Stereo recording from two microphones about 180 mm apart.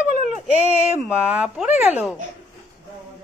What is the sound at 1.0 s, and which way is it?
A woman's voice, 5° right (ahead or behind).